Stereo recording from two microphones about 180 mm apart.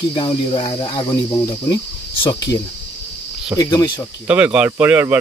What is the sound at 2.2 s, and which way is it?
Cricket, 20° left (ahead or behind).